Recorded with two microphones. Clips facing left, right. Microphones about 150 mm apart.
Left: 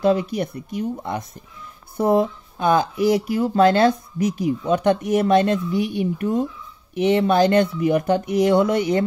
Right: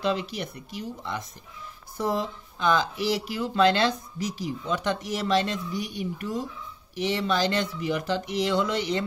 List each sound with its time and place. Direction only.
0.0 s speech: 50° left (ahead or behind)